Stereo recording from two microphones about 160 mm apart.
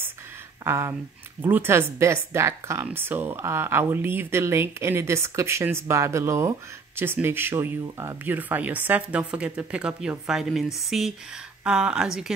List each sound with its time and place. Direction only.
0.7 s a woman's voice: 15° right (ahead or behind)